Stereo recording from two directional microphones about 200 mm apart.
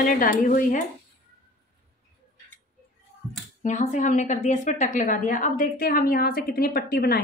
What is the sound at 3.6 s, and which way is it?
A woman's voice, 40° left (ahead or behind).